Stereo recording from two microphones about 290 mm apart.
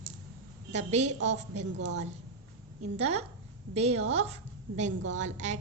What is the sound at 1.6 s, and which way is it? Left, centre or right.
Speech, right.